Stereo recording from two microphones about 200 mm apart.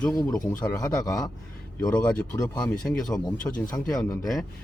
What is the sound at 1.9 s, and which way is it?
Speech, 5° left (ahead or behind).